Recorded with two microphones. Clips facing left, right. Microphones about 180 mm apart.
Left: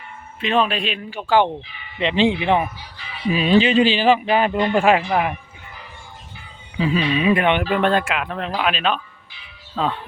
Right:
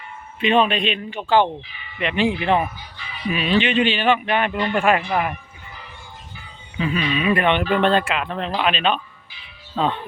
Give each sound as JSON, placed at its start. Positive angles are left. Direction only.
{"t": 0.3, "sound": "speech", "side_deg": 0}
{"t": 2.0, "sound": "speech", "side_deg": 25}
{"t": 3.3, "sound": "speech", "side_deg": 35}
{"t": 4.9, "sound": "speech", "side_deg": 10}
{"t": 6.7, "sound": "speech", "side_deg": 30}
{"t": 7.3, "sound": "speech", "side_deg": 15}